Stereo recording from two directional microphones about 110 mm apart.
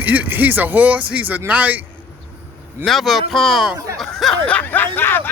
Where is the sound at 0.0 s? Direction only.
15° right (ahead or behind).